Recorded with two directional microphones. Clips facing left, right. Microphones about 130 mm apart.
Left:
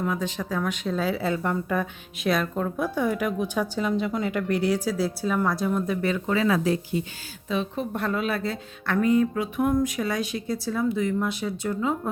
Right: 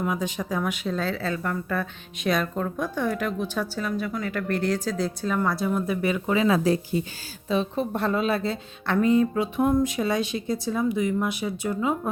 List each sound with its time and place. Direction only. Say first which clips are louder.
0.0 s speech: even; 15° right (ahead or behind)
0.9 s speech: left 2 dB; 10° left (ahead or behind)
2.2 s speech: even; centre (ahead or behind); by 6.6 s 15° right (ahead or behind)
6.9 s speech: right 1 dB; 40° right (ahead or behind); by 12.1 s 15° right (ahead or behind)